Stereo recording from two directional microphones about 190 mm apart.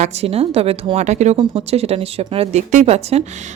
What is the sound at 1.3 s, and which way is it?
Speech, 25° right (ahead or behind).